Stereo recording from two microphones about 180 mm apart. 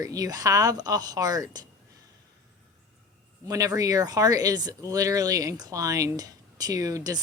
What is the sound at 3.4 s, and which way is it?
Speech, 20° right (ahead or behind).